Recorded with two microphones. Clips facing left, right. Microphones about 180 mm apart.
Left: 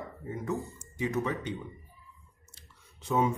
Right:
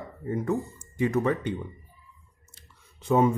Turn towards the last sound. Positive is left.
turn(degrees=-55)  # may be behind; listen again after turning